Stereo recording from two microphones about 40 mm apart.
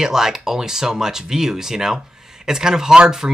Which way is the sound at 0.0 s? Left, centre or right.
Centre.